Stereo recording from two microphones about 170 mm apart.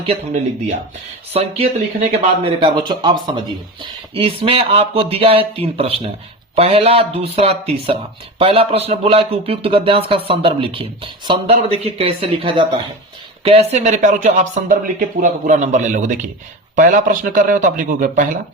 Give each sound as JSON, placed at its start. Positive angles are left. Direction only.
{"t": 1.3, "sound": "speech", "side_deg": -35}